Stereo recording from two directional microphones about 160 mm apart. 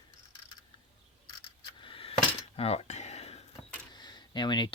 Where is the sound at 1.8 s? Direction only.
35° left (ahead or behind).